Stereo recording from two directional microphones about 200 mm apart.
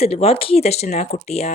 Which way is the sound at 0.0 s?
30° left (ahead or behind).